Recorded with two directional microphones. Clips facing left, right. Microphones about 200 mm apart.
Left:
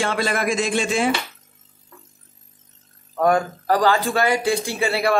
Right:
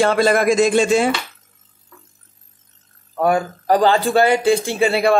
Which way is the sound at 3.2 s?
5° right (ahead or behind).